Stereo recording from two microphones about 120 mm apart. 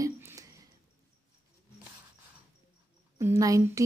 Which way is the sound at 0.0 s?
25° right (ahead or behind).